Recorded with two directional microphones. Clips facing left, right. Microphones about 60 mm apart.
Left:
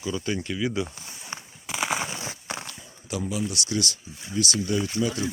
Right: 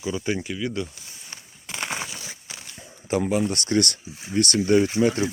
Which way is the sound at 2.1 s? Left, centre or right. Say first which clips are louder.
Left 5 dB; left.